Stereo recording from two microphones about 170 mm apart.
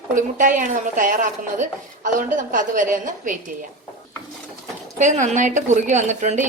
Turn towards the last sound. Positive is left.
turn(degrees=-45)  # may be behind; listen again after turning